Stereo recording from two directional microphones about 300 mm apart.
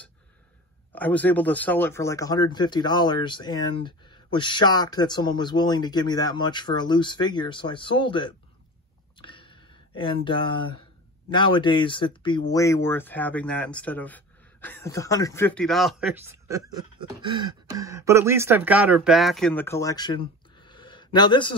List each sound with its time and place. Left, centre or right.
0.9 s speech: centre
9.2 s a sound: centre
11.2 s speech: centre